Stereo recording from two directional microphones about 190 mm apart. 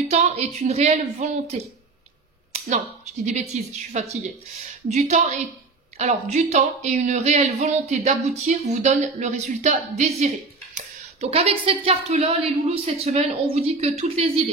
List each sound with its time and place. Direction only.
0.1 s a woman's voice: 35° right (ahead or behind)
3.3 s a woman's voice: 35° right (ahead or behind)